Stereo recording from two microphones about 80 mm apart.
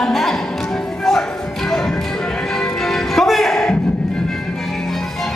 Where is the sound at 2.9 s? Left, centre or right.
Centre.